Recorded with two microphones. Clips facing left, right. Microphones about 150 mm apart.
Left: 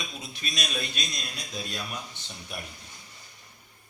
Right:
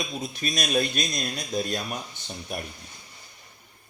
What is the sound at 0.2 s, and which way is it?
Speech, 45° right (ahead or behind).